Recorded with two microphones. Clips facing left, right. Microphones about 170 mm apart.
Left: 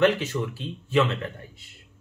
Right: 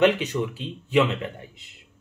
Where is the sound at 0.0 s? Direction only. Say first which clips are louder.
Right 1 dB; 15° right (ahead or behind).